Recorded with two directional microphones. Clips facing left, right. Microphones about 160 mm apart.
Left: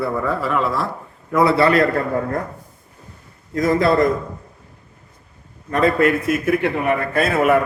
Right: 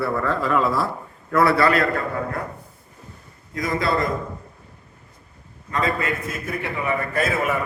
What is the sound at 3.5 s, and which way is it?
Speech, 50° left (ahead or behind).